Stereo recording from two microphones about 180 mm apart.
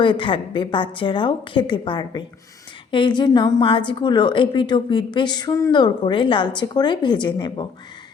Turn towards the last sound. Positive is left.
turn(degrees=25)  # may be behind; listen again after turning